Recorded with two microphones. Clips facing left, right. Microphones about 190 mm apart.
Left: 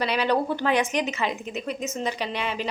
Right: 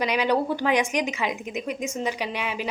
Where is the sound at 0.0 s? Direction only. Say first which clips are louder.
Right 1 dB; 15° right (ahead or behind).